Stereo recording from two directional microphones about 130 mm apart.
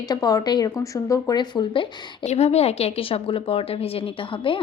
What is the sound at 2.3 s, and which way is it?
Speech, 55° left (ahead or behind).